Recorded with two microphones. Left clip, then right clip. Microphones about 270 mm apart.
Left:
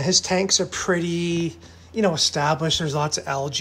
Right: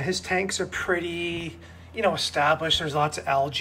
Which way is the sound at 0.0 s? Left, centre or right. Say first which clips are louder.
Left 5 dB; centre.